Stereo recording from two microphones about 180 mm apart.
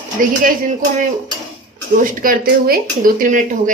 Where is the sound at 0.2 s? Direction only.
50° right (ahead or behind).